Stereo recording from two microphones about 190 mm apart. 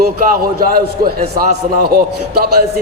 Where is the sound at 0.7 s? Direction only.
50° right (ahead or behind).